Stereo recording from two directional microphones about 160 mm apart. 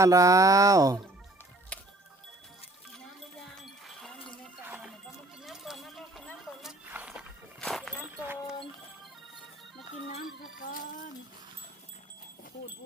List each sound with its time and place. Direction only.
0.0 s speech: 20° right (ahead or behind)
1.7 s music: 5° left (ahead or behind)
3.5 s music: 5° left (ahead or behind)
4.6 s music: 10° right (ahead or behind)
5.0 s music: centre (ahead or behind)
7.6 s a sound: 5° left (ahead or behind)
8.0 s clip-clop: 5° right (ahead or behind)
10.6 s a sound: 60° left (ahead or behind)